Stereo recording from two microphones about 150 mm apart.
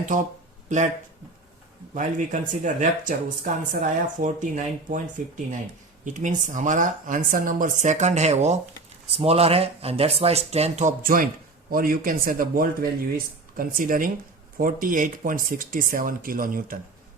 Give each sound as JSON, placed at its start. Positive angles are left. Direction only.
{"t": 0.0, "sound": "speech", "side_deg": -60}
{"t": 1.9, "sound": "speech", "side_deg": -60}
{"t": 6.1, "sound": "speech", "side_deg": -55}